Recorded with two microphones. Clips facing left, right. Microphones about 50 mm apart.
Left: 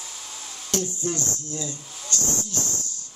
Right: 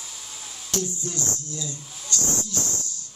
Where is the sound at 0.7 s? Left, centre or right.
Left.